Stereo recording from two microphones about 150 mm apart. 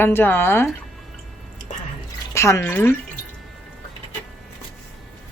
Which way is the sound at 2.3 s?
15° left (ahead or behind).